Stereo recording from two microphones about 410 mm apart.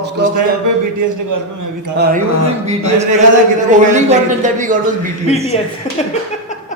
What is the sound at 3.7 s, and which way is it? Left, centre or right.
Speech, centre.